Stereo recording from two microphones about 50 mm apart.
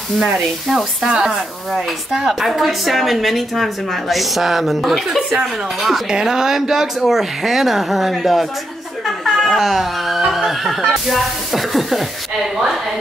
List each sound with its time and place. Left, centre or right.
0.2 s speech: centre
6.0 s speech: centre